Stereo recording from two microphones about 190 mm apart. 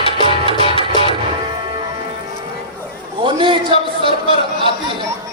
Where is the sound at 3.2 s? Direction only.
25° right (ahead or behind).